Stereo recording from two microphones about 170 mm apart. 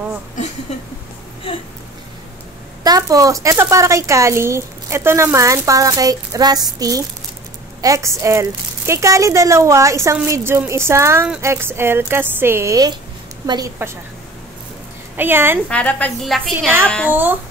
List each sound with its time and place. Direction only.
1.5 s a sound: 30° left (ahead or behind)
2.8 s a woman's voice: 20° right (ahead or behind)
15.1 s speech: 10° right (ahead or behind)
15.7 s a woman's voice: 10° left (ahead or behind)
17.1 s speech: 10° right (ahead or behind)